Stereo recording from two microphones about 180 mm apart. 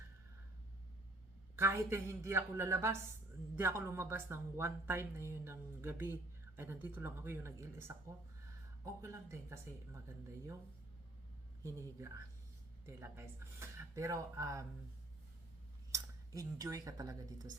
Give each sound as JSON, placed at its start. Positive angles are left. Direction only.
{"t": 1.5, "sound": "speech", "side_deg": -15}
{"t": 11.6, "sound": "speech", "side_deg": -15}
{"t": 15.9, "sound": "speech", "side_deg": -20}